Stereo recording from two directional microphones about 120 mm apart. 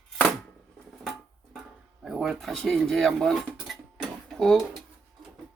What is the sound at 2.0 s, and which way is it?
Speech, centre (ahead or behind).